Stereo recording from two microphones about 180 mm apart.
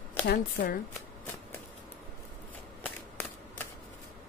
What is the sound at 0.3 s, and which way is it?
Speech, 55° left (ahead or behind).